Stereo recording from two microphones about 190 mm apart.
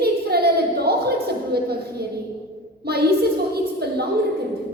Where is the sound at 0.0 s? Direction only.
55° right (ahead or behind).